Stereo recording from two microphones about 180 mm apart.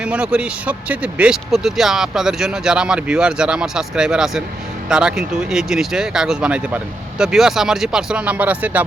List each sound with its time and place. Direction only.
0.0 s speech: 5° right (ahead or behind)